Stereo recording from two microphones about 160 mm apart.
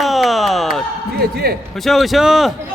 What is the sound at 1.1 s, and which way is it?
Music, 90° right.